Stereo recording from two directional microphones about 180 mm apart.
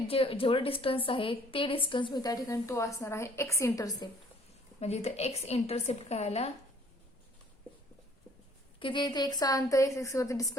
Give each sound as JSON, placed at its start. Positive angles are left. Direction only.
{"t": 0.1, "sound": "a woman's voice", "side_deg": 30}
{"t": 4.8, "sound": "a woman's voice", "side_deg": 35}
{"t": 8.8, "sound": "a woman's voice", "side_deg": 25}